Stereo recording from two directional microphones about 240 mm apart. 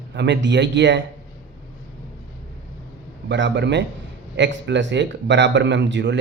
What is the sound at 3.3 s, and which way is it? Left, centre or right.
A man's voice, right.